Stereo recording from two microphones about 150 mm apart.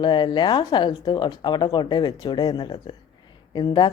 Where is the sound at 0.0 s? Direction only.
30° left (ahead or behind).